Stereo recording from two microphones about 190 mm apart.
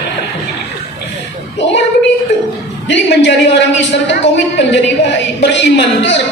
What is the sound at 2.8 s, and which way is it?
A woman's voice, 65° left (ahead or behind).